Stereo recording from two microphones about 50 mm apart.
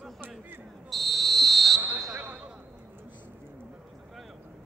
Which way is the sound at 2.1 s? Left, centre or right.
Right.